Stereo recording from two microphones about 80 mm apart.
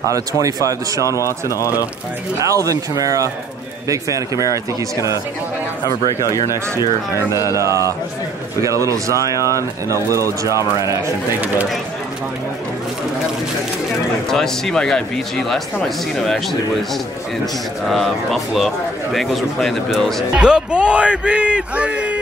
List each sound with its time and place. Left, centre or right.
0.1 s speech: right
1.0 s speech: left
2.3 s speech: right
6.1 s speech: left
7.4 s speech: right
14.3 s speech: centre
17.8 s speech: centre
20.3 s speech: centre